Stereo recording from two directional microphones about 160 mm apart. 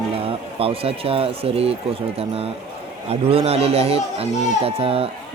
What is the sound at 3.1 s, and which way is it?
Speech, 40° right (ahead or behind).